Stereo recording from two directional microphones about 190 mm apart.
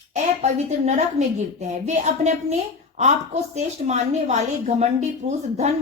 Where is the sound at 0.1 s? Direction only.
35° right (ahead or behind).